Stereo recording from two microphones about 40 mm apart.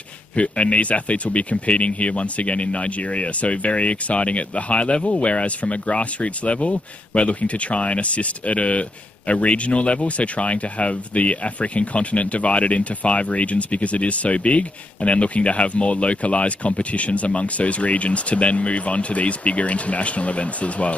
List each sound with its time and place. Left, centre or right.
0.4 s speech: left